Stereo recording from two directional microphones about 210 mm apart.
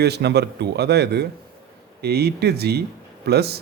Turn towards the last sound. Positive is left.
turn(degrees=-50)  # may be behind; listen again after turning